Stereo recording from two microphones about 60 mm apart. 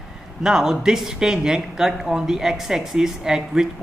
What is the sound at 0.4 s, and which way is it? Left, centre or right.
Speech, centre.